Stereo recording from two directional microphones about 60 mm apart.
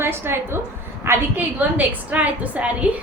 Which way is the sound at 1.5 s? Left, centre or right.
Right.